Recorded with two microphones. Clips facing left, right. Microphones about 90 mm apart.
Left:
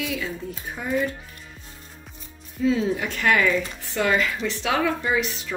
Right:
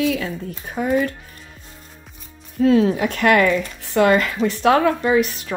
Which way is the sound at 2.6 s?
65° right (ahead or behind).